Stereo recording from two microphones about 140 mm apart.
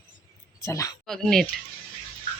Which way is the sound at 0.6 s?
25° left (ahead or behind).